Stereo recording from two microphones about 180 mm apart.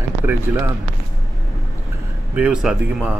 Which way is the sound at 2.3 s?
5° right (ahead or behind).